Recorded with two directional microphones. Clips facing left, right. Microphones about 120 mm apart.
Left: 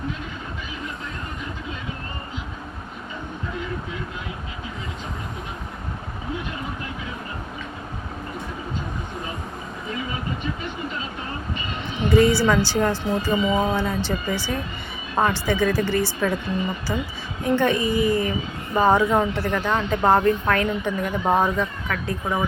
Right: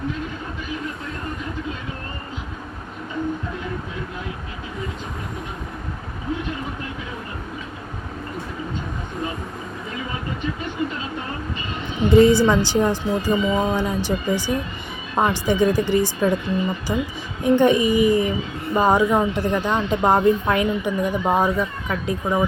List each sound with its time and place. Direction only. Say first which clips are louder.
12.0 s a woman's voice: right 4 dB; 20° right (ahead or behind)
13.3 s speech: even; 10° left (ahead or behind)
13.7 s a woman's voice: right 2 dB; 15° right (ahead or behind)